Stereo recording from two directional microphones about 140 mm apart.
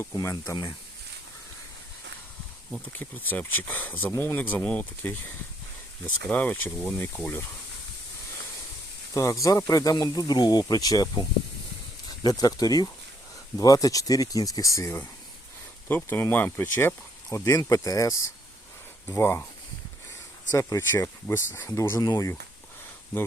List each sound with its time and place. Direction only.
0.0 s speech: 20° left (ahead or behind)
2.9 s speech: 15° left (ahead or behind)
6.2 s speech: 10° left (ahead or behind)
9.1 s speech: 25° left (ahead or behind)
17.4 s speech: 25° left (ahead or behind)
20.5 s speech: 20° left (ahead or behind)